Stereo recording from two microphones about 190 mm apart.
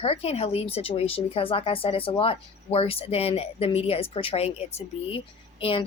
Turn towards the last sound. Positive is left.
turn(degrees=30)  # may be behind; listen again after turning